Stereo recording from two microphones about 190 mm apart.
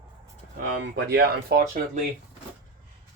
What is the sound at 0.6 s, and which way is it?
Speech, 60° right (ahead or behind).